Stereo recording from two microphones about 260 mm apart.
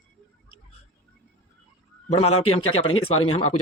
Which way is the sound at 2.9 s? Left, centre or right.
Left.